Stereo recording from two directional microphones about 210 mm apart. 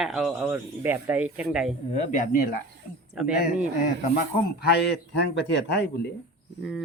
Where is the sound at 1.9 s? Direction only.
35° left (ahead or behind).